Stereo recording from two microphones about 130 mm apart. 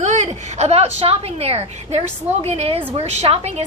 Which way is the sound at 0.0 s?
65° right (ahead or behind).